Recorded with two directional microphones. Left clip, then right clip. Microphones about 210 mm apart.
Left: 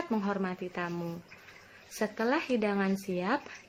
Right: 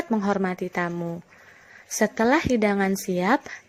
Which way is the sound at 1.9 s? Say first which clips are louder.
Right 9 dB; 40° right (ahead or behind).